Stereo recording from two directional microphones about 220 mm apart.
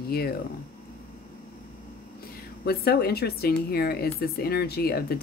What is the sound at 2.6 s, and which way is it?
A woman's voice, 45° left (ahead or behind).